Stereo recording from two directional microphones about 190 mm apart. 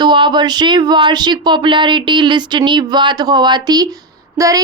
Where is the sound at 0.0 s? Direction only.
25° right (ahead or behind).